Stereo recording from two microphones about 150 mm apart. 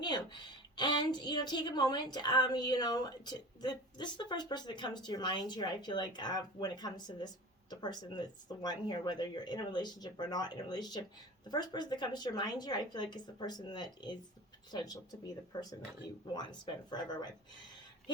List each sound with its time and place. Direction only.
0.0 s a woman's voice: 30° left (ahead or behind)
16.3 s a woman's voice: 30° left (ahead or behind)